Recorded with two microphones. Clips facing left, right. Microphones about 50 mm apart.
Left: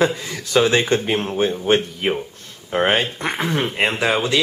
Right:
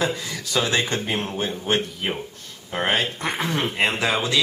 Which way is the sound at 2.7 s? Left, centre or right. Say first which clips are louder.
Left 5 dB; centre.